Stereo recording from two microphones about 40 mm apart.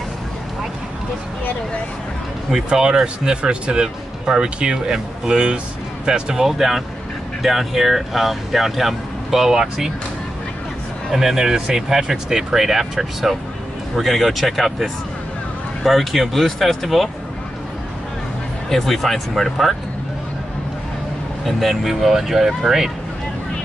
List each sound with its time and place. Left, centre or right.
2.7 s speech: centre
11.1 s speech: centre
18.7 s speech: centre
21.5 s speech: centre